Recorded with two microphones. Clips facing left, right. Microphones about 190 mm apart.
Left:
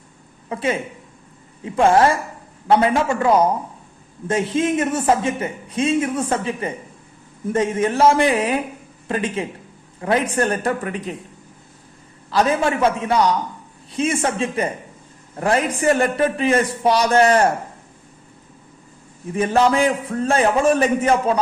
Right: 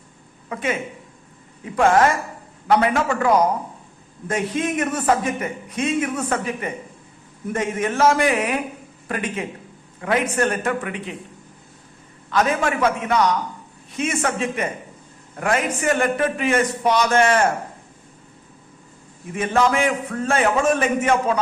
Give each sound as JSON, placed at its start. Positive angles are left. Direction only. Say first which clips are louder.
{"t": 0.4, "sound": "a man's voice", "louder": "left 2 dB", "side_deg": 30}
{"t": 12.3, "sound": "a man's voice", "louder": "left 2 dB", "side_deg": 30}
{"t": 19.3, "sound": "a man's voice", "louder": "left 3 dB", "side_deg": 35}